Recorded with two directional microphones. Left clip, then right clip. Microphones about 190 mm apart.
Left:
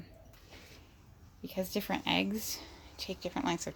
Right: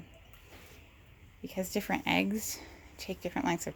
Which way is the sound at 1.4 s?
20° right (ahead or behind).